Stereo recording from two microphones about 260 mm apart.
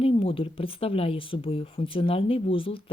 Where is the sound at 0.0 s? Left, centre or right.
Left.